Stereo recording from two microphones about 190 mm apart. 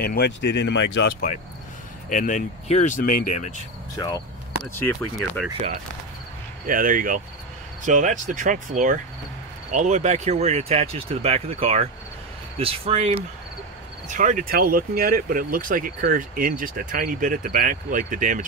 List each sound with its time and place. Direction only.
0.0 s speech: 55° left (ahead or behind)
2.0 s speech: 45° left (ahead or behind)
3.9 s speech: 20° left (ahead or behind)
6.6 s speech: 45° right (ahead or behind)